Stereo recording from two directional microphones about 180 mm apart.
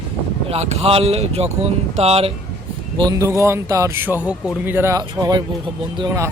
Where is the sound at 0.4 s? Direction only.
35° right (ahead or behind).